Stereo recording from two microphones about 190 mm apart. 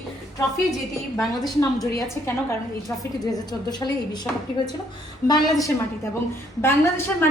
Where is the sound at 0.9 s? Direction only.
Centre (ahead or behind).